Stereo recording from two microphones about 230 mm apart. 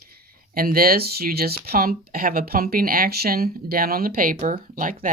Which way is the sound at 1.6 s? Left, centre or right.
Right.